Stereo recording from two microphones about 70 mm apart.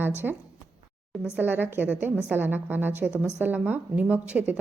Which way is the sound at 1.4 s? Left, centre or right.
Right.